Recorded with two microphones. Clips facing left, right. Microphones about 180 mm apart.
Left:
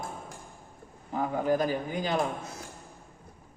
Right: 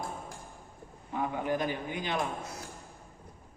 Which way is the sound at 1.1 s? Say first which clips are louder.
Left 4 dB; 35° left (ahead or behind).